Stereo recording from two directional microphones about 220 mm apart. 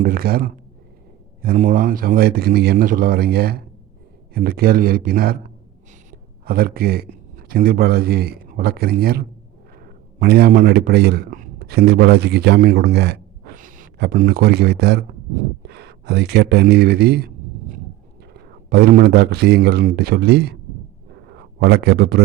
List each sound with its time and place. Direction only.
0.0 s a man's voice: 40° right (ahead or behind)
6.4 s speech: 45° right (ahead or behind)
13.6 s speech: 35° right (ahead or behind)
18.7 s speech: 45° right (ahead or behind)
21.6 s speech: 45° right (ahead or behind)